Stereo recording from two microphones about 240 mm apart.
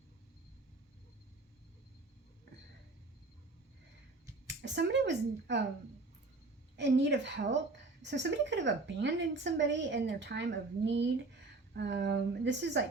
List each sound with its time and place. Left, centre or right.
4.4 s speech: right
6.7 s a woman's voice: right